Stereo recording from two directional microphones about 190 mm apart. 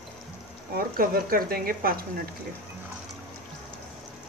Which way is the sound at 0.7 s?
50° right (ahead or behind).